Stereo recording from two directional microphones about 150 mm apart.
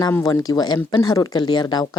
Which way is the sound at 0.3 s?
25° left (ahead or behind).